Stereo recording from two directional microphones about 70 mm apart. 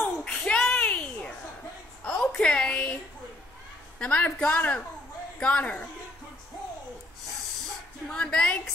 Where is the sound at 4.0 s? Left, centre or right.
Centre.